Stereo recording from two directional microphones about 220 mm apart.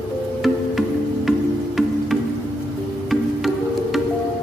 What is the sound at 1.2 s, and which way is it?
Music, centre (ahead or behind).